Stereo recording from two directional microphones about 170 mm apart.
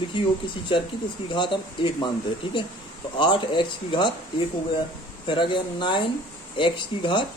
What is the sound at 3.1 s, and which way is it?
Speech, 30° left (ahead or behind).